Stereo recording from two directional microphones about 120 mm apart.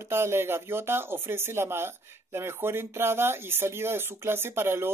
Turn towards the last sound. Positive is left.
turn(degrees=-20)  # may be behind; listen again after turning